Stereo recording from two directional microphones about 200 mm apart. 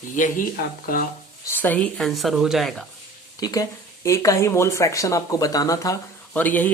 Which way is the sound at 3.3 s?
20° left (ahead or behind).